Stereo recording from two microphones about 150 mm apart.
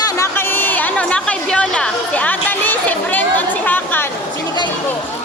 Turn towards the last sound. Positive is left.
turn(degrees=10)  # may be behind; listen again after turning